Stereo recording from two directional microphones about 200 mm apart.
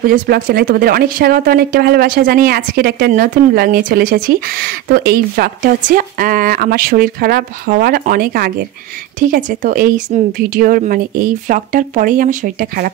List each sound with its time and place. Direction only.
0.0 s speech: 45° right (ahead or behind)